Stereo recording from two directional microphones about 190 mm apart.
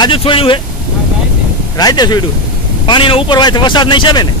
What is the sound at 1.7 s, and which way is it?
Speech, 20° left (ahead or behind).